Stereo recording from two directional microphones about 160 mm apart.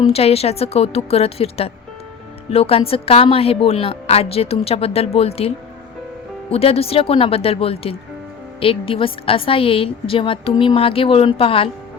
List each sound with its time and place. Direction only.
0.0 s a woman's voice: 40° left (ahead or behind)
6.5 s a woman's voice: 35° left (ahead or behind)